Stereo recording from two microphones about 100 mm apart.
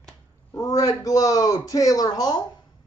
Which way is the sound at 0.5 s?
35° left (ahead or behind).